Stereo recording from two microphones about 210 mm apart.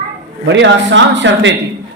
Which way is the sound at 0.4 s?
55° right (ahead or behind).